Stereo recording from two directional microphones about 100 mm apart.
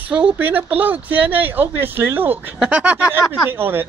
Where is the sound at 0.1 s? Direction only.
15° right (ahead or behind).